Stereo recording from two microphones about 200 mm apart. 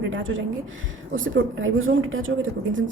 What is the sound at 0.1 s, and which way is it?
A woman's voice, 75° right (ahead or behind).